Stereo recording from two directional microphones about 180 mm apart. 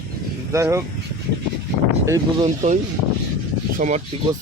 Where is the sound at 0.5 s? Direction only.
15° right (ahead or behind).